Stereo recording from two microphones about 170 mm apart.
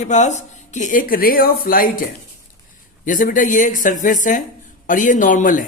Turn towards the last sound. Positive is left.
turn(degrees=50)  # may be behind; listen again after turning